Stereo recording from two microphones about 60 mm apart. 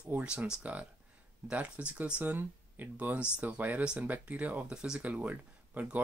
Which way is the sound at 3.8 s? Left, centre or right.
Centre.